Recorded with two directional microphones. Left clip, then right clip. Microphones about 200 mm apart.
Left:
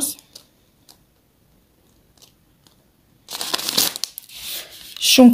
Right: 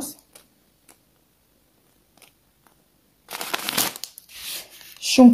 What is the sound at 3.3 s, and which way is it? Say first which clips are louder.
Crumpling: left 3 dB; 15° right (ahead or behind).